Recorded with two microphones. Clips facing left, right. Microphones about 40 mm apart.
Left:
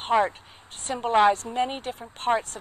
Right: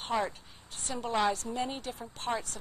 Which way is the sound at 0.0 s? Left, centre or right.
Left.